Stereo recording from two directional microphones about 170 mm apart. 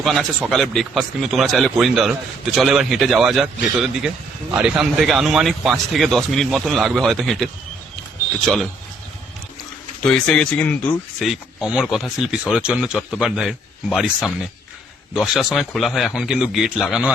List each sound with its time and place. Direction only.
0.0 s speech: centre (ahead or behind)
10.0 s speech: 5° left (ahead or behind)